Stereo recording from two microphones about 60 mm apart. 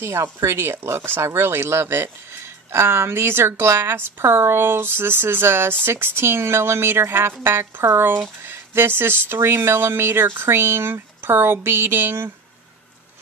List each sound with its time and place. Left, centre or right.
0.0 s speech: right